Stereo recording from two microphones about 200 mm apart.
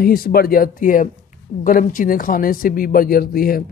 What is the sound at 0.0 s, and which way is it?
Speech, 50° left (ahead or behind).